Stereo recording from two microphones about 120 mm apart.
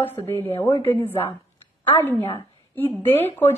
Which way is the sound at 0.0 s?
20° left (ahead or behind).